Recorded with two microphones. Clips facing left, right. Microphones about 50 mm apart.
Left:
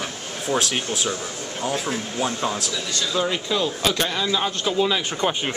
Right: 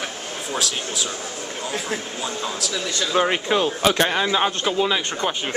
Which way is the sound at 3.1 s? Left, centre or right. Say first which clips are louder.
Right 4 dB; right.